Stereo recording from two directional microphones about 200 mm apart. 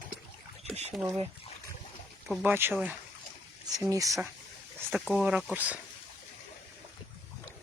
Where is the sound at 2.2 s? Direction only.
5° right (ahead or behind).